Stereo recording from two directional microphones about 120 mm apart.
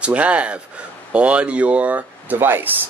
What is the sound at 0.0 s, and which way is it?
Speech, 10° right (ahead or behind).